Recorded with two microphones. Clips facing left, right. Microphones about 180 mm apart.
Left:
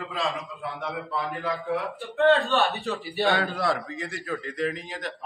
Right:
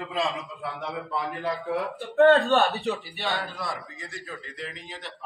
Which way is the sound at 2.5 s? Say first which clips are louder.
Right 2 dB; 40° right (ahead or behind).